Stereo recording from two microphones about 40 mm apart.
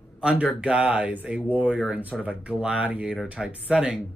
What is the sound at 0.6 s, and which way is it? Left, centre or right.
Speech, right.